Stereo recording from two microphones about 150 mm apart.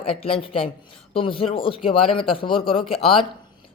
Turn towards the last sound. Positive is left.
turn(degrees=35)  # may be behind; listen again after turning